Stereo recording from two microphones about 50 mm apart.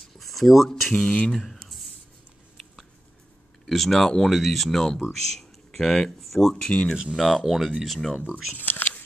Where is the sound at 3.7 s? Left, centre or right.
Centre.